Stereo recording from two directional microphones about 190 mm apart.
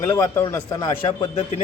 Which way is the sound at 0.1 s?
15° left (ahead or behind).